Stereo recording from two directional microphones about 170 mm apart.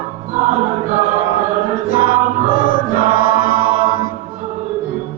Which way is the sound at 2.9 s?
60° left (ahead or behind).